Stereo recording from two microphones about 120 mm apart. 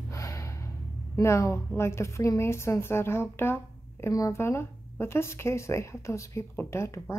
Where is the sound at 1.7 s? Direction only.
20° left (ahead or behind).